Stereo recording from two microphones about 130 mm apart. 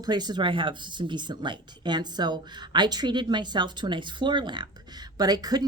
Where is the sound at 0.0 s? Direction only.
35° right (ahead or behind).